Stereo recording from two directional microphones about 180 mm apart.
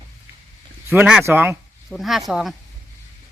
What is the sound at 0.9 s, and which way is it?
Speech, 5° right (ahead or behind).